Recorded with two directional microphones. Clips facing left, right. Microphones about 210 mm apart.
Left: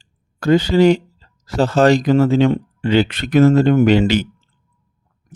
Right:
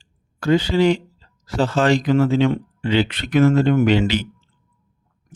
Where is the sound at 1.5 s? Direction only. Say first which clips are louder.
Left 4 dB; 40° left (ahead or behind).